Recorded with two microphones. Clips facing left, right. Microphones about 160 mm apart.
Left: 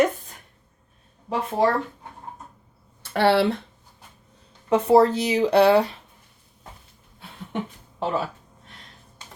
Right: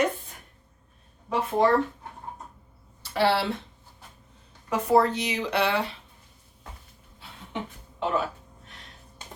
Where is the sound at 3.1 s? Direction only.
60° left (ahead or behind).